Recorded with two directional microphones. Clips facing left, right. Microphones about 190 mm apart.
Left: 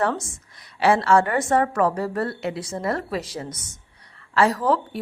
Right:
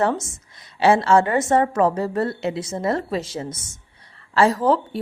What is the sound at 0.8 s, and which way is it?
A woman's voice, 25° right (ahead or behind).